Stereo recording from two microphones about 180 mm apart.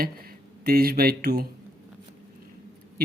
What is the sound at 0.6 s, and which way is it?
Speech, 60° right (ahead or behind).